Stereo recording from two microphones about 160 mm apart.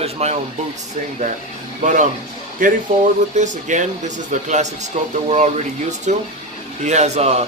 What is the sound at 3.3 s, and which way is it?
Speech, 50° right (ahead or behind).